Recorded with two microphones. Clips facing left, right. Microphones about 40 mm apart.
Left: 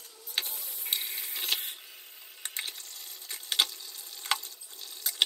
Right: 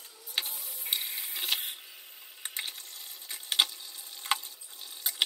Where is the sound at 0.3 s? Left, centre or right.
Centre.